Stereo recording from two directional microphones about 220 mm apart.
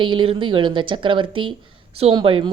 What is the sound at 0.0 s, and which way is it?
A woman's voice, 20° right (ahead or behind).